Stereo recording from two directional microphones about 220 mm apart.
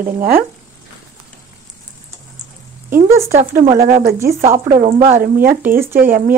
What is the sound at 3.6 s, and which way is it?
Speech, 30° right (ahead or behind).